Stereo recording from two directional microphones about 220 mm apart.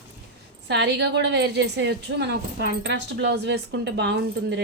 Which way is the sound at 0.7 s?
50° right (ahead or behind).